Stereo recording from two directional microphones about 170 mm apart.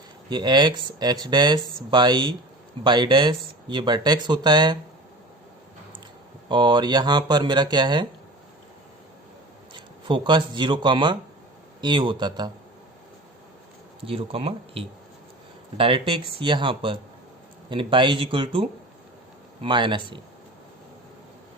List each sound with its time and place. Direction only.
0.3 s speech: 25° right (ahead or behind)
6.5 s speech: 25° right (ahead or behind)
9.7 s speech: 25° right (ahead or behind)
14.0 s speech: 35° right (ahead or behind)